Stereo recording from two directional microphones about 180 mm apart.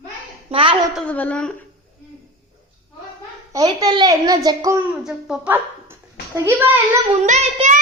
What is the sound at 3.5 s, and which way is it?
A woman's voice, 20° right (ahead or behind).